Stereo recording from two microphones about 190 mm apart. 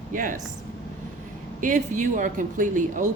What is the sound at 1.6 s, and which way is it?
Speech, 40° right (ahead or behind).